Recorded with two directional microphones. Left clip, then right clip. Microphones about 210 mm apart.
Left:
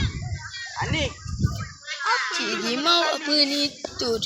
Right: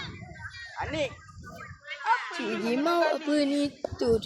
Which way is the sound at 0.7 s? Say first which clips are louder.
Left 4 dB; 55° right (ahead or behind).